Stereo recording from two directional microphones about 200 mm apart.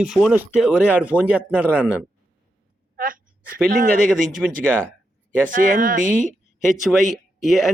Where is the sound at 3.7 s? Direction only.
45° right (ahead or behind).